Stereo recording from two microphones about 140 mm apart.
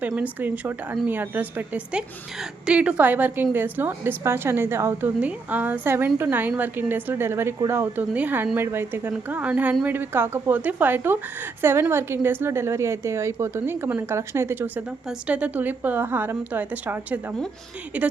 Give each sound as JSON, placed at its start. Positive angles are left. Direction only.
{"t": 0.2, "sound": "a woman's voice", "side_deg": -10}